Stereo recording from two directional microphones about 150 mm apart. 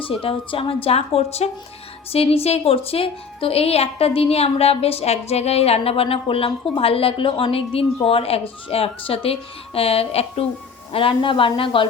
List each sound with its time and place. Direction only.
0.0 s a woman's voice: 35° left (ahead or behind)